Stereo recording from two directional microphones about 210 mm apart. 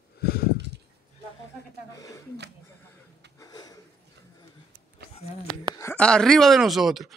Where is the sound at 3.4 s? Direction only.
20° left (ahead or behind).